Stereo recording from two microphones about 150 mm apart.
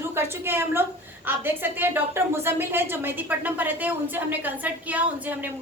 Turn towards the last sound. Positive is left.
turn(degrees=-10)  # may be behind; listen again after turning